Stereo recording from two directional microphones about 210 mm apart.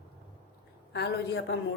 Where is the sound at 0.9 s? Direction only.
50° left (ahead or behind).